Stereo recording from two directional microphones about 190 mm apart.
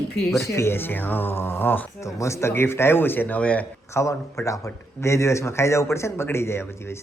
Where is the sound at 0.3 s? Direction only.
15° left (ahead or behind).